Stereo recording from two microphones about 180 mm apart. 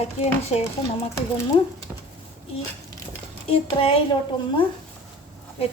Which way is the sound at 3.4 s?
30° left (ahead or behind).